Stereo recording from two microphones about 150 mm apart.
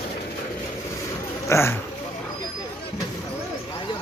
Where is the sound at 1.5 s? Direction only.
20° left (ahead or behind).